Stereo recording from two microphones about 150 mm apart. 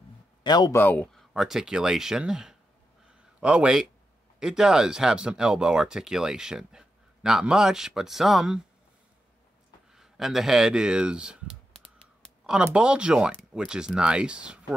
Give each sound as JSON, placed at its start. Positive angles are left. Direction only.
{"t": 0.4, "sound": "speech", "side_deg": 30}
{"t": 0.7, "sound": "speech", "side_deg": 10}
{"t": 3.1, "sound": "a sound", "side_deg": -5}
{"t": 4.4, "sound": "speech", "side_deg": -5}
{"t": 9.9, "sound": "speech", "side_deg": 0}